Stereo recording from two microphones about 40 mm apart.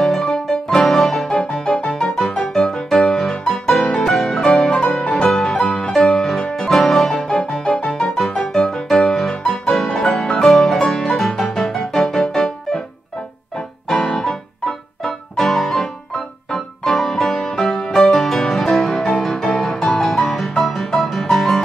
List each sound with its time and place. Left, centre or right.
0.0 s music: centre
1.7 s music: left
2.1 s music: centre
3.2 s music: centre
4.5 s music: centre
6.7 s music: centre
7.1 s music: centre
9.5 s music: centre
9.9 s music: centre
13.8 s music: centre
15.3 s music: centre
21.0 s music: centre